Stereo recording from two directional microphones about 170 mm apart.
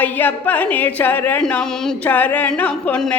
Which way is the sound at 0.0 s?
10° left (ahead or behind).